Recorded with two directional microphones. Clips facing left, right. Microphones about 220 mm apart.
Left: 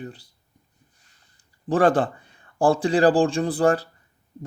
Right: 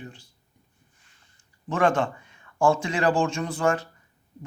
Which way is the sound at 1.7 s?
35° left (ahead or behind).